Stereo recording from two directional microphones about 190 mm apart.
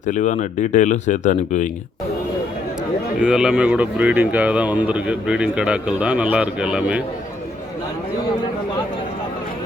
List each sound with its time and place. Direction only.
0.0 s speech: 40° left (ahead or behind)
3.2 s speech: 5° right (ahead or behind)